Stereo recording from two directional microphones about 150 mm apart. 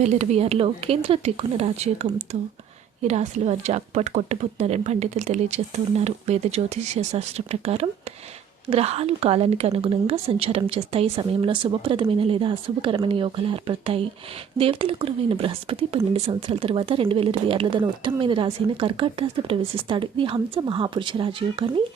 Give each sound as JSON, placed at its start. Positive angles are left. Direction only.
{"t": 0.0, "sound": "a woman's voice", "side_deg": -50}